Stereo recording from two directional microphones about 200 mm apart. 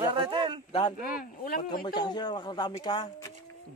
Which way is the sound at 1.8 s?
20° left (ahead or behind).